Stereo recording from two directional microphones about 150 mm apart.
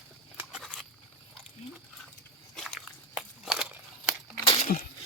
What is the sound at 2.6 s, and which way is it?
Biting, centre (ahead or behind).